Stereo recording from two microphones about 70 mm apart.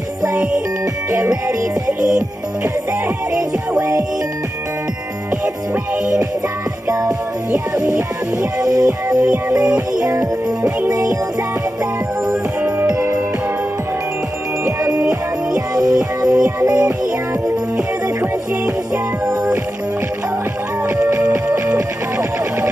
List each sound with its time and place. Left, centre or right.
6.9 s music: right
14.6 s music: right
15.0 s music: right
21.0 s music: right